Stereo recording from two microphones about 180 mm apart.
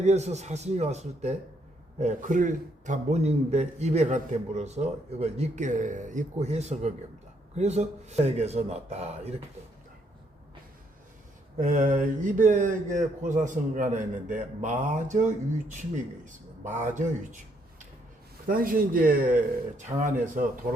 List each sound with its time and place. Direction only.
0.0 s a man's voice: 40° right (ahead or behind)
11.9 s a man's voice: 45° right (ahead or behind)
18.4 s a man's voice: 50° right (ahead or behind)